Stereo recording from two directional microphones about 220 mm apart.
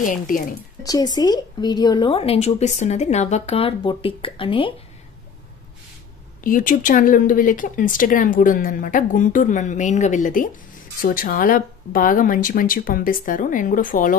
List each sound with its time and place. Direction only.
0.0 s speech: 35° left (ahead or behind)
0.8 s a woman's voice: 15° left (ahead or behind)
6.4 s speech: 35° left (ahead or behind)